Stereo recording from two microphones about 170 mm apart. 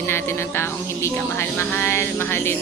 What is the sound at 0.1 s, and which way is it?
A woman's voice, 15° left (ahead or behind).